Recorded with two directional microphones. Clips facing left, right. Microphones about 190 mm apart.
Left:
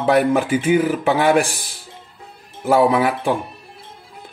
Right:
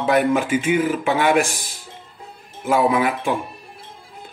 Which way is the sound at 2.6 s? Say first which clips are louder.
Left 3 dB; 35° left (ahead or behind).